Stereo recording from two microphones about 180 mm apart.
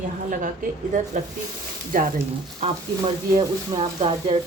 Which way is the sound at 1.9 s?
50° right (ahead or behind).